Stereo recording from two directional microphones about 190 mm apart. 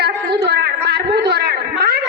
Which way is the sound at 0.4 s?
60° right (ahead or behind).